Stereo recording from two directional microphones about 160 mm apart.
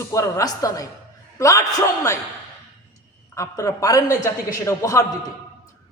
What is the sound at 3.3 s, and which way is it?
A man's voice, 20° left (ahead or behind).